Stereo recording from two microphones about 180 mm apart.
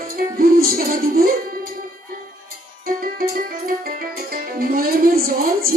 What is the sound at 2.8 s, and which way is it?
Music, 50° right (ahead or behind).